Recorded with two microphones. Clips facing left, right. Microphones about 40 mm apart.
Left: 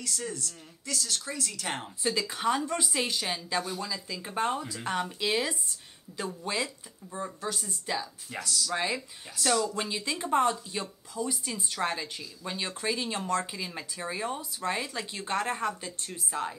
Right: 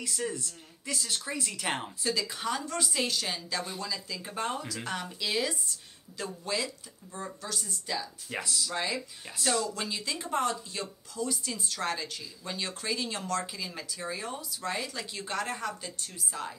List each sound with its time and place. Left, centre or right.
0.0 s speech: centre
2.0 s speech: left
2.8 s speech: centre
8.3 s speech: centre
8.7 s speech: left